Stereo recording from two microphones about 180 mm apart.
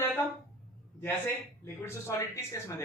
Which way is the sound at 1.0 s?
15° left (ahead or behind).